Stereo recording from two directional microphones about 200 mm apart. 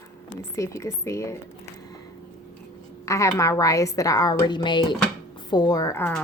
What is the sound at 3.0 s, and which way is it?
A woman's voice, 15° left (ahead or behind).